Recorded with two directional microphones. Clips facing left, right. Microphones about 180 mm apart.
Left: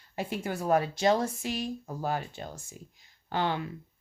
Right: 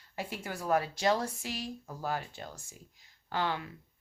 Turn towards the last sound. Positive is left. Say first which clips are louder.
# left 3 dB
turn(degrees=25)  # may be behind; listen again after turning